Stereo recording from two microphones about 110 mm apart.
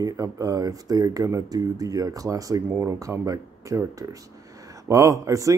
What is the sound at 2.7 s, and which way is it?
Speech, 20° right (ahead or behind).